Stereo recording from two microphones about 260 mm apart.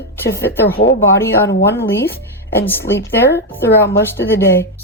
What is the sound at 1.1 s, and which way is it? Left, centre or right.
Speech, centre.